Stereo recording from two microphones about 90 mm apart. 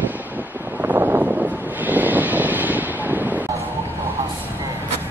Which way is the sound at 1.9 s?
20° right (ahead or behind).